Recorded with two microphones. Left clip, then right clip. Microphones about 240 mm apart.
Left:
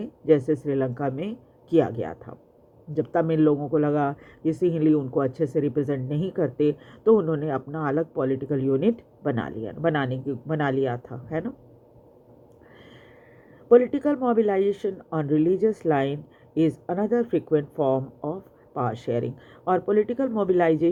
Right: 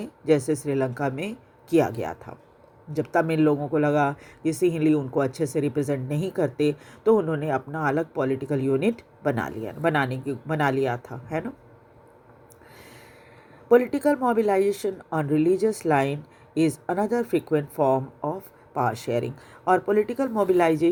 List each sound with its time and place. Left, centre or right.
0.0 s a woman's voice: right
13.7 s a woman's voice: right